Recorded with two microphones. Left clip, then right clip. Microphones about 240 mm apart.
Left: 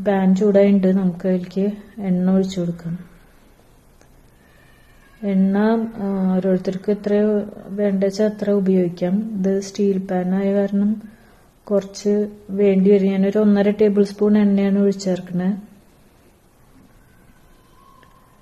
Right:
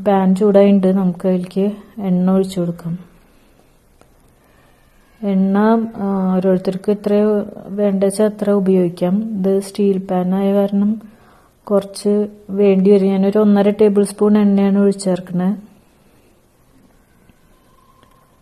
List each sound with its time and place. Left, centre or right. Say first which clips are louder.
0.0 s a woman's voice: right 4 dB; right
5.2 s a woman's voice: right 4 dB; right